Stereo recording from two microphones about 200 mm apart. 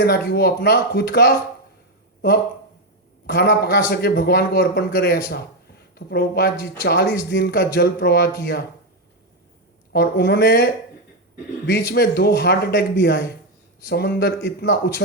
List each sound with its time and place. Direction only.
0.0 s speech: 55° left (ahead or behind)
3.3 s a man's voice: 55° left (ahead or behind)
9.9 s a man's voice: 55° left (ahead or behind)